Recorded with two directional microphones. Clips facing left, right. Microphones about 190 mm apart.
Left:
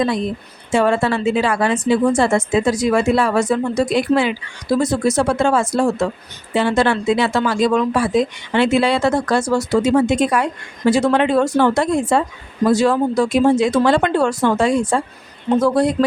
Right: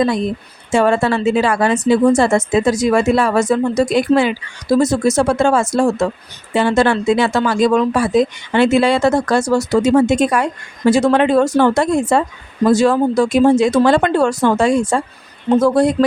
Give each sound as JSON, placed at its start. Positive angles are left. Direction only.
{"t": 0.7, "sound": "speech", "side_deg": -45}